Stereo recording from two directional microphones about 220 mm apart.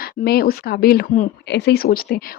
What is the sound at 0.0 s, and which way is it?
Speech, 45° left (ahead or behind).